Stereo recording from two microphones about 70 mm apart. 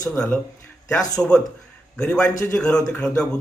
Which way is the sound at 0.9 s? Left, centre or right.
Left.